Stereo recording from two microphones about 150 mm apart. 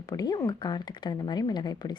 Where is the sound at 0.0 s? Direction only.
25° left (ahead or behind).